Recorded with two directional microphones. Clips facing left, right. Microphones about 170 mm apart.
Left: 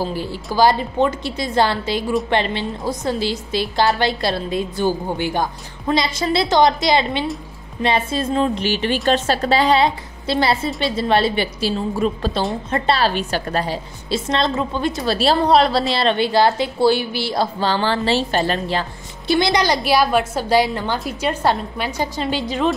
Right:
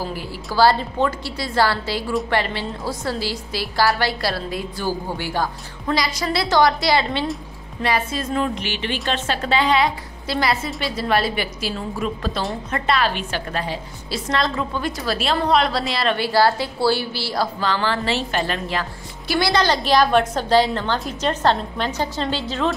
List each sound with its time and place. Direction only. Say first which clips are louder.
0.0 s a woman's voice: left 4 dB; 30° left (ahead or behind)
0.6 s a woman's voice: left 1 dB; 15° left (ahead or behind); by 13.7 s 40° left (ahead or behind)
14.1 s a woman's voice: left 3 dB; 25° left (ahead or behind)
16.0 s a woman's voice: left 1 dB; 25° left (ahead or behind)